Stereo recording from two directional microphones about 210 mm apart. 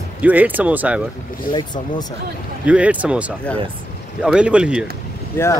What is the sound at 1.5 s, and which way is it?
Speech, 20° left (ahead or behind).